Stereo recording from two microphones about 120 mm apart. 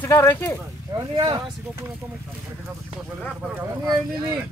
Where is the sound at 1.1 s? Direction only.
40° right (ahead or behind).